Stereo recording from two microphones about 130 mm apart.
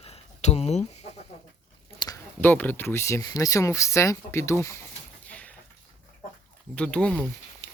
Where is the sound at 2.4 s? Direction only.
15° left (ahead or behind).